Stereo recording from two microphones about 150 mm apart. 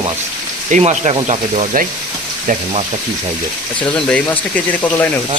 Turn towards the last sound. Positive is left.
turn(degrees=10)  # may be behind; listen again after turning